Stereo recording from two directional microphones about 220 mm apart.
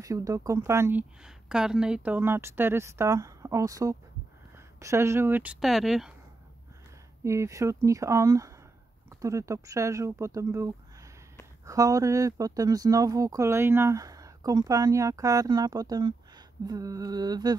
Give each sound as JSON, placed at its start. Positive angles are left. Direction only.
{"t": 0.0, "sound": "speech", "side_deg": -15}
{"t": 7.2, "sound": "speech", "side_deg": -15}